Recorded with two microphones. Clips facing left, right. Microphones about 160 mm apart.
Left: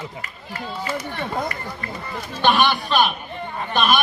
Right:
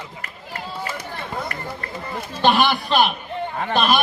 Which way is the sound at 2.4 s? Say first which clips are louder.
Right 1 dB; 30° right (ahead or behind).